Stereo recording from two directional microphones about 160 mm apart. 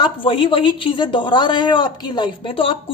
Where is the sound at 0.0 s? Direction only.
30° left (ahead or behind).